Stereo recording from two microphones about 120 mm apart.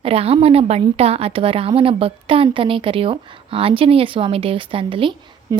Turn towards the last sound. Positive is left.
turn(degrees=-45)  # may be behind; listen again after turning